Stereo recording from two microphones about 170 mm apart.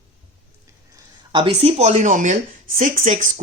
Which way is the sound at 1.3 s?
25° right (ahead or behind).